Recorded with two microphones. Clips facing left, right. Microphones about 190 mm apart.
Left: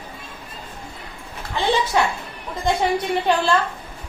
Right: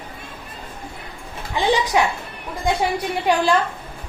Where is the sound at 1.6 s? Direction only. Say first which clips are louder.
Right 1 dB; 15° right (ahead or behind).